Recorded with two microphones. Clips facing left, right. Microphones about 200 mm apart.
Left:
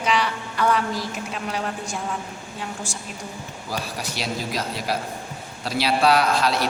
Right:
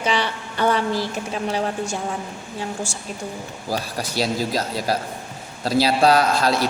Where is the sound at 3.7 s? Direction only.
35° right (ahead or behind).